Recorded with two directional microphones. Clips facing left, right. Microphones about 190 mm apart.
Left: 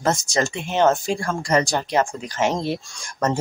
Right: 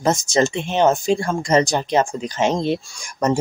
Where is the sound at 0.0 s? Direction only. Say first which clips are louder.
Right 4 dB; 20° right (ahead or behind).